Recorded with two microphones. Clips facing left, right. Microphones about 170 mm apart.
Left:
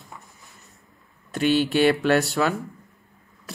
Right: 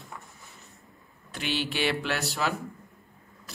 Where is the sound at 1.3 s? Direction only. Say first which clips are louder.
Left 11 dB; 50° left (ahead or behind).